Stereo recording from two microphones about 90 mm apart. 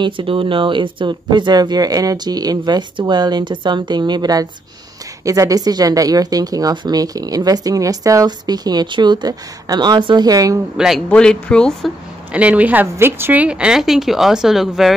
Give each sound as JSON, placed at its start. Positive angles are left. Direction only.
{"t": 0.0, "sound": "speech", "side_deg": -75}
{"t": 8.3, "sound": "speech", "side_deg": -50}
{"t": 11.1, "sound": "speech", "side_deg": 10}
{"t": 12.3, "sound": "a woman's voice", "side_deg": -15}